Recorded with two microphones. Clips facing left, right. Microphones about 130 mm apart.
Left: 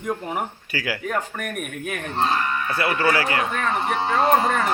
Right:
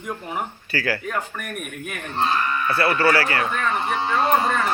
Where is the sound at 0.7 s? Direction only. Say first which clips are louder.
Right 5 dB; 15° left (ahead or behind).